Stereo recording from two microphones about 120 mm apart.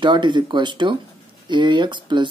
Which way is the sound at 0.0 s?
40° right (ahead or behind).